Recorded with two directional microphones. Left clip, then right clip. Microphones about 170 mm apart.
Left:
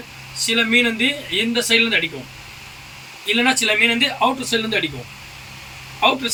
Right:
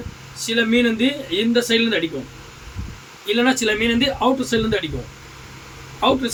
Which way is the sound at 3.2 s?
15° right (ahead or behind).